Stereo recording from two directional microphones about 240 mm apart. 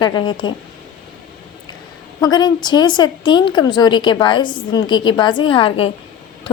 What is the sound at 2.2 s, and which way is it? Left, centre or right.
A woman's voice, centre.